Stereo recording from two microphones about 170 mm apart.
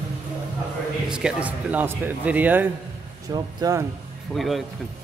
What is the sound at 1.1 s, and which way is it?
Speech, 5° right (ahead or behind).